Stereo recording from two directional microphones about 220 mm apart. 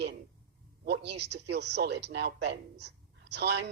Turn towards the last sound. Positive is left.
turn(degrees=-50)  # may be behind; listen again after turning